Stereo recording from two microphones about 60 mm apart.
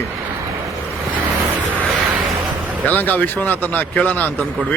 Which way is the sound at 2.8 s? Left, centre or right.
Left.